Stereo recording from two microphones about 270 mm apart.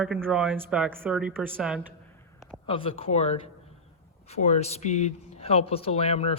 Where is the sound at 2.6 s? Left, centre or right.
Centre.